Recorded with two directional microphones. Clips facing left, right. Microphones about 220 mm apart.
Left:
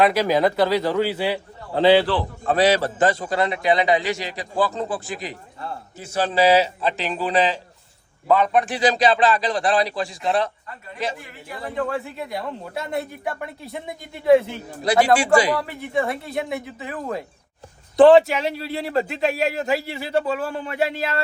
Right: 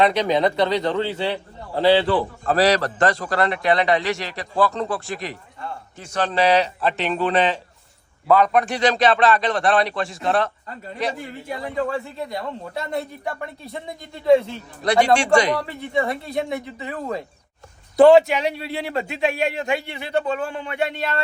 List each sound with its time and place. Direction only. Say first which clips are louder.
0.0 s a man's voice: even; 5° left (ahead or behind)
1.7 s a man's voice: left 1 dB; 20° left (ahead or behind)
2.0 s a man's voice: right 1 dB; centre (ahead or behind)